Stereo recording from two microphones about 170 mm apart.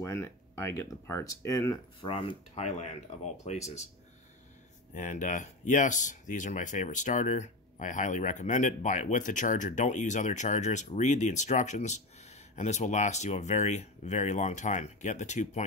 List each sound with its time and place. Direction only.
0.0 s speech: 15° left (ahead or behind)
2.0 s speech: 35° left (ahead or behind)
4.9 s speech: 45° left (ahead or behind)